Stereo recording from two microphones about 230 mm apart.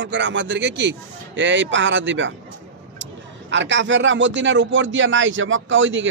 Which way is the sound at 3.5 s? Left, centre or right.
Right.